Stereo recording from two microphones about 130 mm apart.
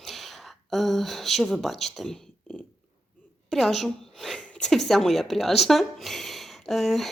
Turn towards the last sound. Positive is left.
turn(degrees=0)  # may be behind; listen again after turning